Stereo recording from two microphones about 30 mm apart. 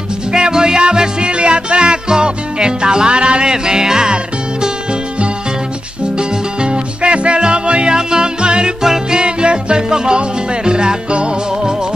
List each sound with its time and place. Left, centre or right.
0.3 s music: right
6.1 s music: right
8.8 s music: centre
9.2 s music: right